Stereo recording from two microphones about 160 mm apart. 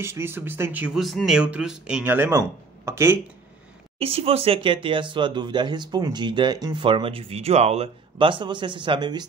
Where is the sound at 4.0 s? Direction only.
40° right (ahead or behind).